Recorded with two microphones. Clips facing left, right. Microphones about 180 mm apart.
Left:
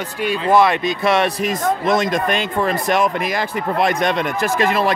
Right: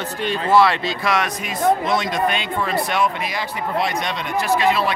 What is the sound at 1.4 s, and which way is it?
Speech, 45° left (ahead or behind).